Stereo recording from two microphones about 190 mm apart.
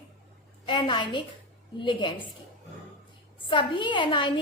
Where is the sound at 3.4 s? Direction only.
25° left (ahead or behind).